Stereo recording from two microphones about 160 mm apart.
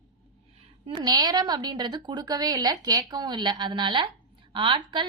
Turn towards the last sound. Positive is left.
turn(degrees=-30)  # may be behind; listen again after turning